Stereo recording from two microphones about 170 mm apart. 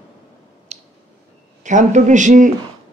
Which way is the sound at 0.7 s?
40° right (ahead or behind).